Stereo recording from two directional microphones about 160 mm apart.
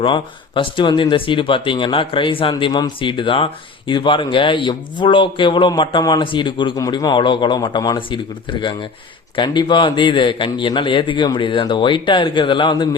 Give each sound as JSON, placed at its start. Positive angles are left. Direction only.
{"t": 0.0, "sound": "speech", "side_deg": 30}